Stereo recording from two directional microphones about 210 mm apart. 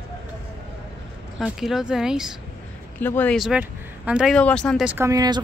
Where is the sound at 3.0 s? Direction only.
10° left (ahead or behind).